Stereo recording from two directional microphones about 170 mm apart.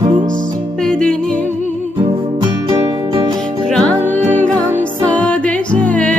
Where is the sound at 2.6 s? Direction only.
25° right (ahead or behind).